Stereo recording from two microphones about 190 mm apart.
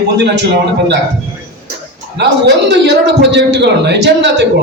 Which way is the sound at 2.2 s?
65° right (ahead or behind).